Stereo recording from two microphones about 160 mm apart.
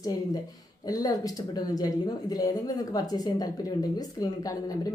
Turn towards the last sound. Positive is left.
turn(degrees=25)  # may be behind; listen again after turning